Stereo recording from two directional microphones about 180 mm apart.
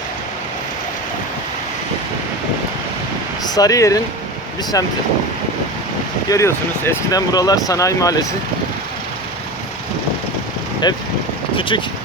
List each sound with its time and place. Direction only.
3.4 s speech: 20° left (ahead or behind)
6.2 s speech: 15° left (ahead or behind)
10.8 s speech: 25° left (ahead or behind)